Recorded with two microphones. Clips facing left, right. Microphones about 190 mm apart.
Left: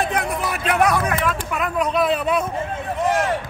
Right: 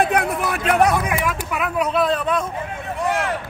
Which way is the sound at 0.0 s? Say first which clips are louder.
Right 3 dB; 60° right (ahead or behind).